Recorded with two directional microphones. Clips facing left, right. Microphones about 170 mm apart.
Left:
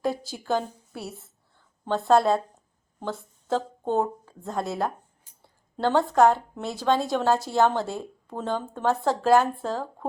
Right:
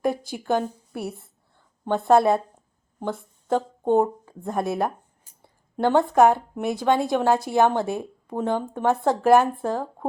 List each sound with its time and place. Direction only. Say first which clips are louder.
0.3 s a woman's voice: right 3 dB; 20° right (ahead or behind)